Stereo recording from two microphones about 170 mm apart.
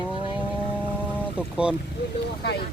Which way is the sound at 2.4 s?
75° left (ahead or behind).